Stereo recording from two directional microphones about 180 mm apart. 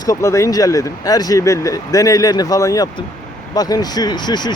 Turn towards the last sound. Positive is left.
turn(degrees=25)  # may be behind; listen again after turning